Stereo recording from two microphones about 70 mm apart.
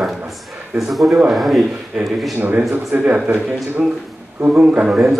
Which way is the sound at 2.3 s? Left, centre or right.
Right.